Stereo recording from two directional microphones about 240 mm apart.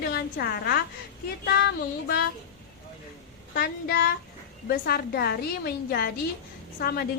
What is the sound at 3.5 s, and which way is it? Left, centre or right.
A woman's voice, left.